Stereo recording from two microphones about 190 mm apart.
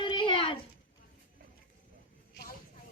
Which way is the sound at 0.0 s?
25° left (ahead or behind).